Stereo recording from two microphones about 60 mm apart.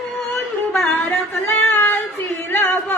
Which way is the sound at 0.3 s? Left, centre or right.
Centre.